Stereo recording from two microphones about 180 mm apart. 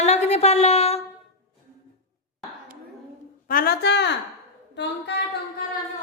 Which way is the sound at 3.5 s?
55° left (ahead or behind).